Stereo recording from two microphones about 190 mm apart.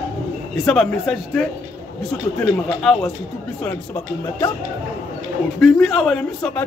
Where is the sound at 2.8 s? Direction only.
Centre (ahead or behind).